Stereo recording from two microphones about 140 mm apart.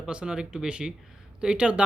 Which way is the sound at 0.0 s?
5° right (ahead or behind).